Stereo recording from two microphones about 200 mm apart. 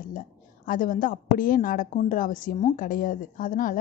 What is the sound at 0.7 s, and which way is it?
A woman's voice, 45° left (ahead or behind).